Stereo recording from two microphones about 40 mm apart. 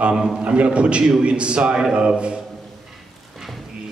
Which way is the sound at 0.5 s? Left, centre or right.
Right.